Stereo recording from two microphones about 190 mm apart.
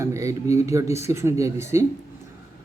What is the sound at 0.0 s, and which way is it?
Speech, 15° right (ahead or behind).